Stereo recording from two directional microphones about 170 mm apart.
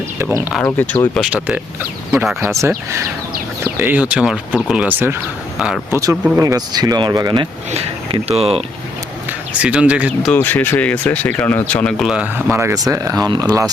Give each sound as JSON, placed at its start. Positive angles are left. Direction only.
{"t": 0.2, "sound": "speech", "side_deg": -15}
{"t": 0.6, "sound": "speech", "side_deg": 10}
{"t": 1.2, "sound": "speech", "side_deg": -10}
{"t": 3.6, "sound": "a sound", "side_deg": -15}
{"t": 4.1, "sound": "speech", "side_deg": -5}
{"t": 6.0, "sound": "speech", "side_deg": -20}
{"t": 7.7, "sound": "speech", "side_deg": -35}
{"t": 9.6, "sound": "speech", "side_deg": -5}
{"t": 10.3, "sound": "speech", "side_deg": 10}